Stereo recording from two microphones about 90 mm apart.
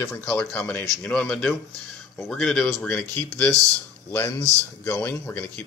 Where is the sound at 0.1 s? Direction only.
15° left (ahead or behind).